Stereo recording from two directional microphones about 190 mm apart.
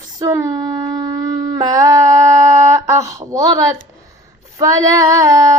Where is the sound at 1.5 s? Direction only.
15° right (ahead or behind).